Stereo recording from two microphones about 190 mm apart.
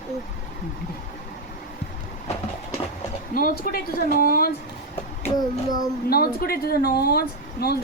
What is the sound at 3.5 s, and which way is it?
Speech, 50° left (ahead or behind).